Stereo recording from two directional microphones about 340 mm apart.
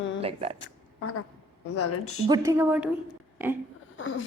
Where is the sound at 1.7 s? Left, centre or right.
Left.